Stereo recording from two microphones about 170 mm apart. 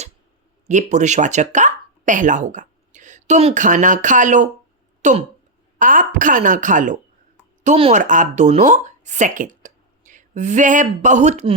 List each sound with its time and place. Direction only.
0.7 s a woman's voice: 45° right (ahead or behind)